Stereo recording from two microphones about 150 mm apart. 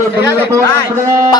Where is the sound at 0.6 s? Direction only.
20° left (ahead or behind).